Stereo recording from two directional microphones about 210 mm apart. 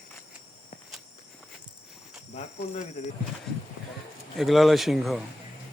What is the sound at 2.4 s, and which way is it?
Cricket, 30° left (ahead or behind).